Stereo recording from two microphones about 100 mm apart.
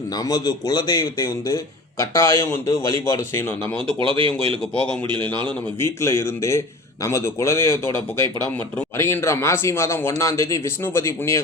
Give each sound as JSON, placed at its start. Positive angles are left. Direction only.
{"t": 0.2, "sound": "a man's voice", "side_deg": 40}
{"t": 3.8, "sound": "speech", "side_deg": -60}
{"t": 5.8, "sound": "a man's voice", "side_deg": 25}